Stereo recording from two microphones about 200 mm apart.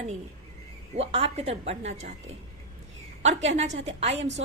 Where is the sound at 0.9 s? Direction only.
30° right (ahead or behind).